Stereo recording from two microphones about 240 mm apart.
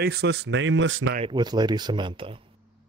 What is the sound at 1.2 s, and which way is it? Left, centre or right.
Speech, centre.